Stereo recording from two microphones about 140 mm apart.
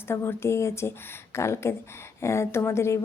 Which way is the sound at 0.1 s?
15° left (ahead or behind).